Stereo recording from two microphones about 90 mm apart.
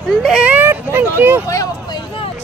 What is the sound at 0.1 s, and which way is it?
Speech, 5° right (ahead or behind).